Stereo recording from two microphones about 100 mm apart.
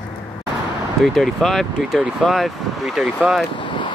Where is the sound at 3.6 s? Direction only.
60° left (ahead or behind).